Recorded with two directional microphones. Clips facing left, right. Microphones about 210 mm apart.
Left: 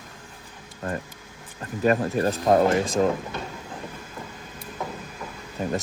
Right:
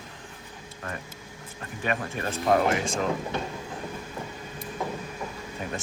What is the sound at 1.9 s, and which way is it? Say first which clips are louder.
Speech: left 9 dB; 40° left (ahead or behind).